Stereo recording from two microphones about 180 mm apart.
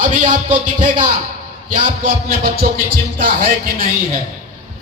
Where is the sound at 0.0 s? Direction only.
45° right (ahead or behind).